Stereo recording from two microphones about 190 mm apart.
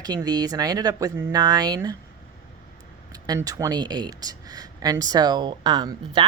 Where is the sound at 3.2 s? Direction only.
20° right (ahead or behind).